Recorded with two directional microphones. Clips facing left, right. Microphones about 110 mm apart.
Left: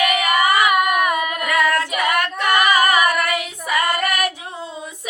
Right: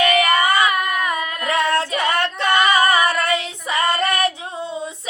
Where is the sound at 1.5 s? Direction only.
25° right (ahead or behind).